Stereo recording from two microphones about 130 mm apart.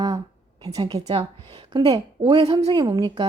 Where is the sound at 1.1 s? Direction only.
45° right (ahead or behind).